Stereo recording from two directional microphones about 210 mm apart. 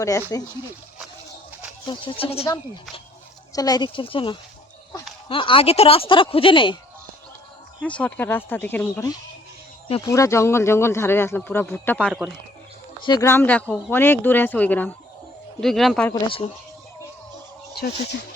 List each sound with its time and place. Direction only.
0.0 s speech: 15° left (ahead or behind)
1.9 s speech: 25° left (ahead or behind)
7.8 s speech: 5° left (ahead or behind)
13.0 s speech: 20° left (ahead or behind); by 16.1 s 5° left (ahead or behind)
16.2 s speech: 25° left (ahead or behind)